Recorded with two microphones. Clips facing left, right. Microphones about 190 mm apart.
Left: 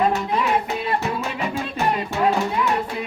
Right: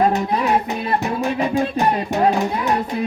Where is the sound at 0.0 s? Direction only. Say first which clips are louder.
Right 3 dB; 40° right (ahead or behind).